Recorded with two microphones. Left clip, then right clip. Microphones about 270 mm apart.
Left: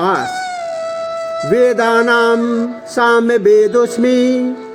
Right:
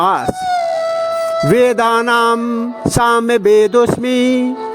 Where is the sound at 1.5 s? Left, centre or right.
Right.